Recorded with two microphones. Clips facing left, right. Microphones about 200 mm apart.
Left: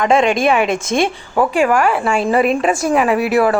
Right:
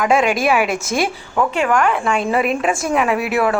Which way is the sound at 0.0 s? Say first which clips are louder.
Left 2 dB; 5° right (ahead or behind).